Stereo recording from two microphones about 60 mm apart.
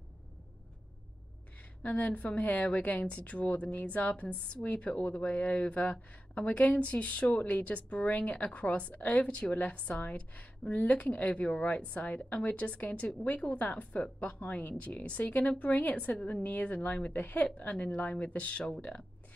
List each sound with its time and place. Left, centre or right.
1.6 s a woman's voice: left